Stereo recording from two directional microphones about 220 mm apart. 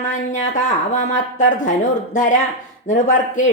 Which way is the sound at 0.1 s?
35° left (ahead or behind).